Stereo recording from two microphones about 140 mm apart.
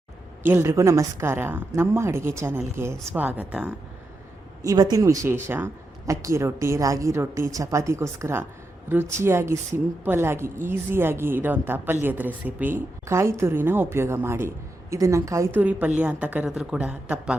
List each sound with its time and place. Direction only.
0.4 s a woman's voice: 15° right (ahead or behind)
4.6 s a woman's voice: 25° right (ahead or behind)
16.0 s a woman's voice: 10° right (ahead or behind)